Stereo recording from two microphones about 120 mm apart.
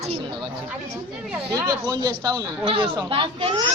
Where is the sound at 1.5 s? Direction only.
30° right (ahead or behind).